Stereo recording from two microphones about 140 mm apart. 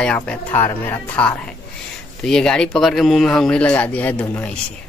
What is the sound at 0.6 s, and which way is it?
Speech, 20° left (ahead or behind).